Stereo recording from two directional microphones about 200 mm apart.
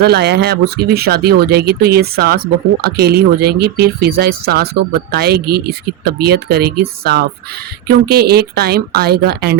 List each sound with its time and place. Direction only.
0.0 s speech: 55° right (ahead or behind)